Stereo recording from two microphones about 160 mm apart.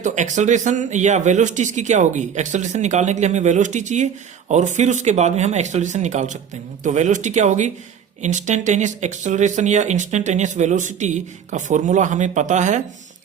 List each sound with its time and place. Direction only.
0.0 s speech: 50° right (ahead or behind)